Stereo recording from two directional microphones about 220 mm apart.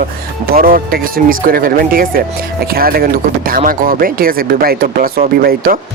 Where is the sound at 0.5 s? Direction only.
40° right (ahead or behind).